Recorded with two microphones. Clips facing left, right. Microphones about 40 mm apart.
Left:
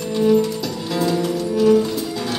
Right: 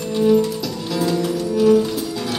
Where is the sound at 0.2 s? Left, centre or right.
Centre.